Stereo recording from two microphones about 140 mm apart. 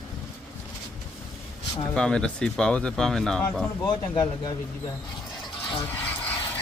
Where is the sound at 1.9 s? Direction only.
5° left (ahead or behind).